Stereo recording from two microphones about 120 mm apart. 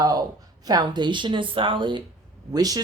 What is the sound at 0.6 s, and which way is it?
Speech, 35° right (ahead or behind).